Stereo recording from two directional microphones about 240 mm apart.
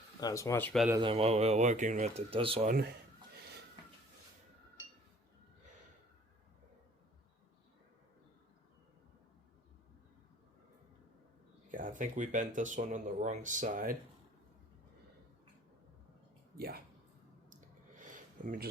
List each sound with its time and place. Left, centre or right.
0.2 s speech: centre
0.9 s speech: centre
11.7 s speech: right
16.6 s speech: right
17.5 s a sound: right